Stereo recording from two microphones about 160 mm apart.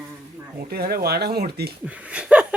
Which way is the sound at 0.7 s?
75° right (ahead or behind).